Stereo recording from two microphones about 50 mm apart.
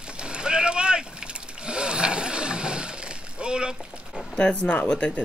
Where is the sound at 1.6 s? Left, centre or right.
Centre.